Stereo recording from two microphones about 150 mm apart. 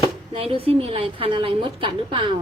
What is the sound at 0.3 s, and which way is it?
A woman's voice, 40° right (ahead or behind).